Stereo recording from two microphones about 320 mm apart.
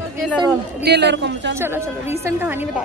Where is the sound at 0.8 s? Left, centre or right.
Right.